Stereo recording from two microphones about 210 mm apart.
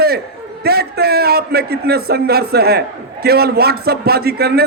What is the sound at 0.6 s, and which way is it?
A man's voice, 50° right (ahead or behind).